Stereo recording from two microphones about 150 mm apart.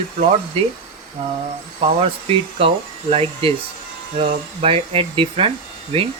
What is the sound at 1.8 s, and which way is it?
Speech, 40° right (ahead or behind).